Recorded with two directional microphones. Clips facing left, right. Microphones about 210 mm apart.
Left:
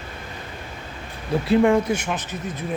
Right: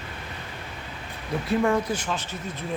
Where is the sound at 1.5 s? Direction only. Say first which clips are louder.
Left 6 dB; 20° left (ahead or behind).